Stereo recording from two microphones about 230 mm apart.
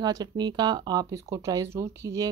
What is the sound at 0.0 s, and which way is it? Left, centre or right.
Speech, centre.